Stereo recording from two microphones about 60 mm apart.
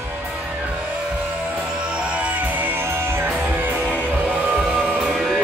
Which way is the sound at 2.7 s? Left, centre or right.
Right.